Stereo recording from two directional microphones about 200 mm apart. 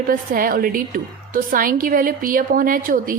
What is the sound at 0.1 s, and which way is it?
A woman's voice, 45° right (ahead or behind).